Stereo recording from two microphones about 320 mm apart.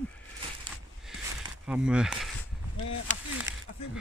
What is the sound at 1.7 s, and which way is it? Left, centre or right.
Speech, centre.